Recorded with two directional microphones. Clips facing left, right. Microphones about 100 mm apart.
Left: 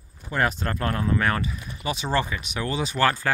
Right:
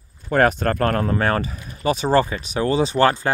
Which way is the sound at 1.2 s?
35° right (ahead or behind).